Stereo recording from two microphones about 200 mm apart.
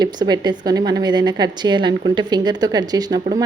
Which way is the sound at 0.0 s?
20° right (ahead or behind).